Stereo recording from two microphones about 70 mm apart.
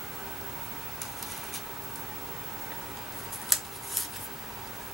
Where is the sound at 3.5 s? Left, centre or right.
Centre.